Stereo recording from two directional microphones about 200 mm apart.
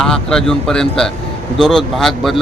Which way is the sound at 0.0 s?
5° left (ahead or behind).